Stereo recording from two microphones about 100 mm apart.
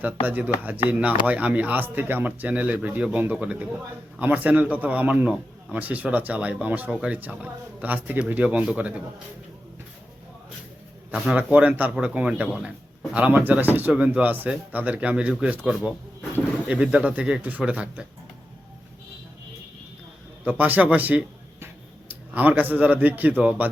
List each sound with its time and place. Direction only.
0.0 s speech: 15° right (ahead or behind)
11.1 s speech: 10° right (ahead or behind)
20.4 s speech: 15° right (ahead or behind)